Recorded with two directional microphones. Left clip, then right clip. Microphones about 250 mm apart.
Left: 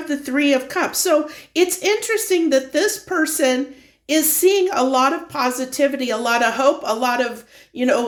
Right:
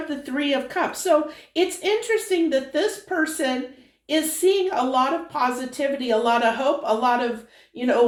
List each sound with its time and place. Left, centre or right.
0.1 s a woman's voice: left